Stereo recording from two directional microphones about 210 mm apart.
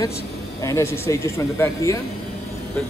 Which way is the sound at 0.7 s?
15° left (ahead or behind).